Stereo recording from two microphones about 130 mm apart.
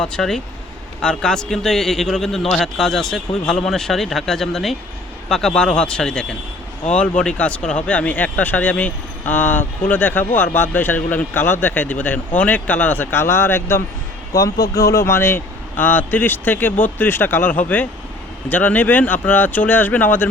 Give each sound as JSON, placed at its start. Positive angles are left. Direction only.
{"t": 0.0, "sound": "a man's voice", "side_deg": 5}